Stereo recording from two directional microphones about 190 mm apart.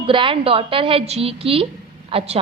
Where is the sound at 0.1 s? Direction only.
25° right (ahead or behind).